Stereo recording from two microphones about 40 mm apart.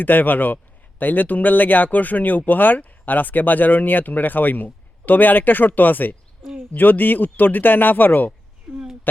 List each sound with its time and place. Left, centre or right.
0.0 s speech: left
8.7 s speech: centre